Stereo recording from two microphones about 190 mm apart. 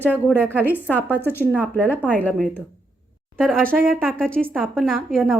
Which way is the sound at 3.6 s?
50° right (ahead or behind).